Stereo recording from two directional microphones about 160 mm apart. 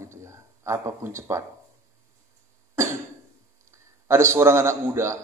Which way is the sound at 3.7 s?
15° right (ahead or behind).